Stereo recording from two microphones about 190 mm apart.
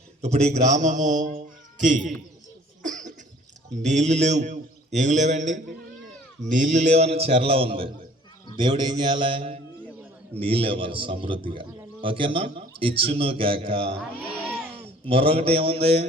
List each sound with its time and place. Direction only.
0.2 s a man's voice: 35° right (ahead or behind)
2.8 s cough: 40° right (ahead or behind)
3.8 s a man's voice: 40° right (ahead or behind)
15.0 s a man's voice: 30° right (ahead or behind)